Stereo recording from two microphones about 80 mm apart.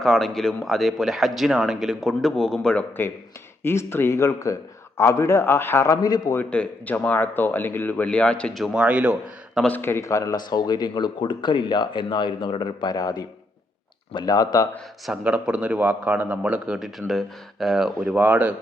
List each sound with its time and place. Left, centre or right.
0.0 s a man's voice: centre
3.6 s a man's voice: left
6.4 s speech: centre
8.5 s a man's voice: centre
8.8 s speech: centre
9.6 s speech: left
10.0 s speech: left
10.3 s speech: left
14.1 s speech: left
15.2 s speech: centre